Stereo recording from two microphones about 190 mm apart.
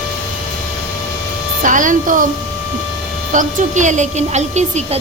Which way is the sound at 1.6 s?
45° right (ahead or behind).